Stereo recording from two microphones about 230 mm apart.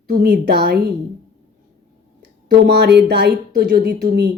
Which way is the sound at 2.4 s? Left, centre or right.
Right.